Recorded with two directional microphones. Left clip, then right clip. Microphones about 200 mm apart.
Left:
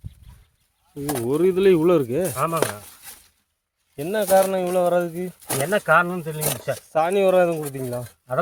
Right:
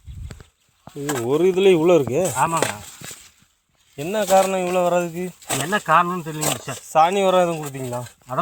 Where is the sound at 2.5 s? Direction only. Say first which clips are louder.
Right 1 dB; 45° left (ahead or behind).